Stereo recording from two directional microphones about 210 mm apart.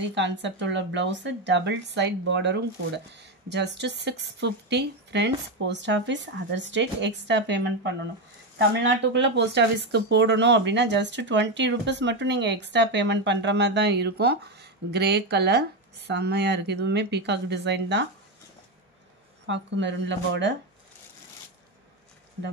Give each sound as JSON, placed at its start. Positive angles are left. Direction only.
{"t": 0.1, "sound": "speech", "side_deg": -60}
{"t": 8.7, "sound": "speech", "side_deg": -55}
{"t": 19.4, "sound": "speech", "side_deg": -60}